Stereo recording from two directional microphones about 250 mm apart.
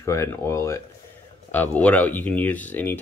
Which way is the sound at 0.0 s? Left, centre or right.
Centre.